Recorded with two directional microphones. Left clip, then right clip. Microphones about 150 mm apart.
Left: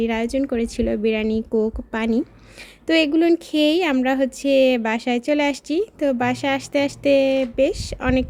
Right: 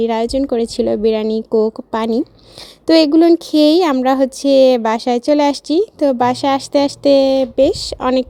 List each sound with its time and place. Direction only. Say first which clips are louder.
0.0 s a woman's voice: right 6 dB; 25° right (ahead or behind)